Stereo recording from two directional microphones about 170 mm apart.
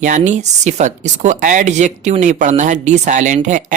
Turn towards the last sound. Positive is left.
turn(degrees=-45)  # may be behind; listen again after turning